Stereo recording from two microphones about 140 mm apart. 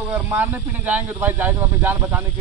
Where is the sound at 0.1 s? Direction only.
10° right (ahead or behind).